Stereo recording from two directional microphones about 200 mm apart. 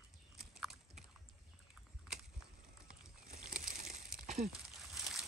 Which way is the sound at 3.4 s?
40° right (ahead or behind).